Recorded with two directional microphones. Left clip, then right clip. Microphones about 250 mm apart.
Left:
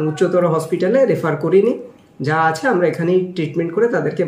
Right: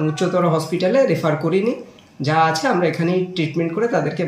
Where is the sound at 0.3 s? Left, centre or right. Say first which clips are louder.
Left 2 dB; centre.